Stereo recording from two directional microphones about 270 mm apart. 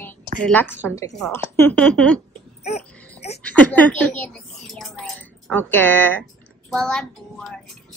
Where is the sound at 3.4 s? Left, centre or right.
Centre.